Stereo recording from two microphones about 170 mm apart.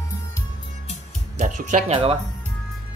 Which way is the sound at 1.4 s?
45° right (ahead or behind).